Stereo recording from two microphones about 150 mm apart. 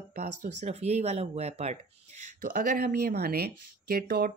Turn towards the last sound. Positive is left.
turn(degrees=-75)  # may be behind; listen again after turning